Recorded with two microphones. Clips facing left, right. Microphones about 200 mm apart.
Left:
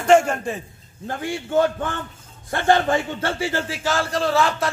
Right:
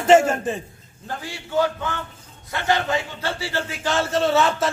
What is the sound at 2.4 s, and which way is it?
A man's voice, 50° left (ahead or behind).